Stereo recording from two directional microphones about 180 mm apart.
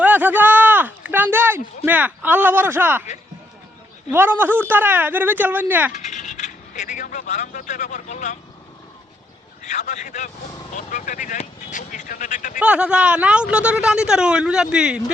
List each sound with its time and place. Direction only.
0.0 s a sound: 10° right (ahead or behind)
4.1 s speech: 10° right (ahead or behind)
5.9 s speech: 40° left (ahead or behind)
9.6 s speech: 45° left (ahead or behind)
12.5 s speech: 5° right (ahead or behind)